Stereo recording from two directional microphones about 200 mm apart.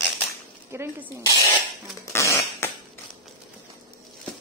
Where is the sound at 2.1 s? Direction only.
15° left (ahead or behind).